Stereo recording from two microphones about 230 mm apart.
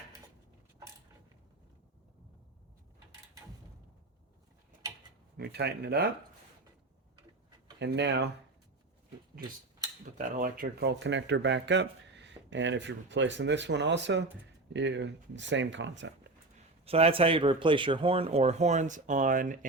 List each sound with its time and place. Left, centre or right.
5.4 s speech: right
7.8 s speech: right
10.2 s speech: right
16.8 s speech: right